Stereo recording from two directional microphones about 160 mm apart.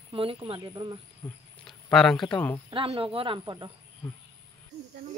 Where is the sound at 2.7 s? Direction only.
35° right (ahead or behind).